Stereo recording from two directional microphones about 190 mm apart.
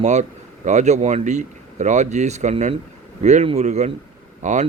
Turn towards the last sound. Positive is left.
turn(degrees=-40)  # may be behind; listen again after turning